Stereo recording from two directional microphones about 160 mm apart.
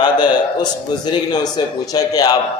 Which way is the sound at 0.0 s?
30° left (ahead or behind).